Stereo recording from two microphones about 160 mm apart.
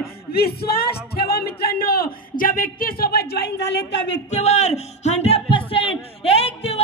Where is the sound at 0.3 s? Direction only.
75° left (ahead or behind).